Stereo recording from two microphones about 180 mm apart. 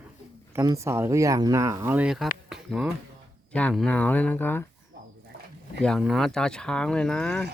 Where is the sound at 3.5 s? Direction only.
5° left (ahead or behind).